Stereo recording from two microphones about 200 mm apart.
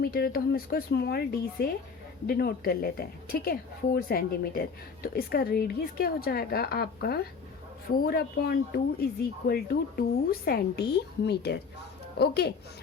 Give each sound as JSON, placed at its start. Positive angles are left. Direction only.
{"t": 0.0, "sound": "a woman's voice", "side_deg": 50}